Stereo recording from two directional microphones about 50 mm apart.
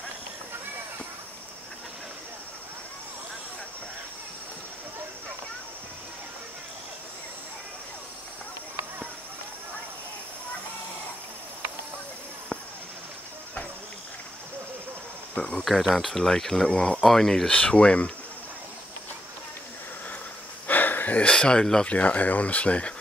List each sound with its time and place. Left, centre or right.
15.3 s insect: left
15.9 s speech: centre
16.6 s speech: centre
17.0 s speech: centre
17.5 s speech: left
20.6 s a sound: left
21.2 s speech: centre
21.8 s speech: left